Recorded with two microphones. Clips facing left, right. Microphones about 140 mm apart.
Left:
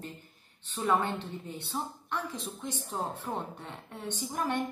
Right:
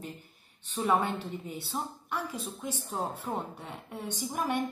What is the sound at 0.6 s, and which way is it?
A woman's voice, 10° right (ahead or behind).